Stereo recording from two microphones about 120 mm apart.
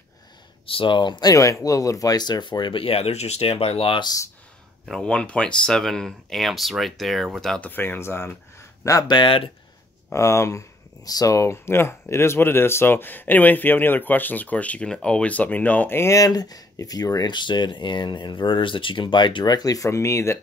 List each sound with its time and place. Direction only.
0.7 s speech: 45° left (ahead or behind)
4.8 s speech: 5° left (ahead or behind)
7.7 s speech: 15° left (ahead or behind); by 9.4 s 40° left (ahead or behind)
10.1 s speech: 25° left (ahead or behind)